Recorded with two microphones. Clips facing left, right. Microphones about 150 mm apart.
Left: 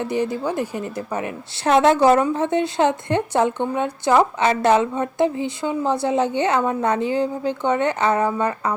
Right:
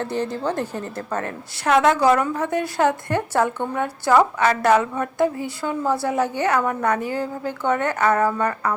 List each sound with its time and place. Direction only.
0.0 s speech: 10° left (ahead or behind)
1.6 s a woman's voice: 30° left (ahead or behind)